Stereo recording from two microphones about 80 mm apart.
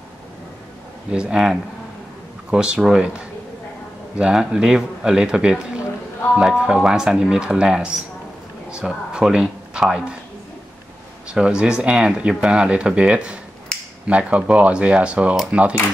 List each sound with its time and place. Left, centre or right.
1.1 s speech: centre
4.2 s speech: centre
11.2 s speech: centre